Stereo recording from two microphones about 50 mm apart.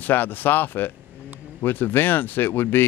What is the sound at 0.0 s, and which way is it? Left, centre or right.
Speech, left.